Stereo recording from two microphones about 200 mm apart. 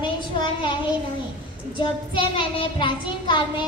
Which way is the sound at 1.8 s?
25° left (ahead or behind).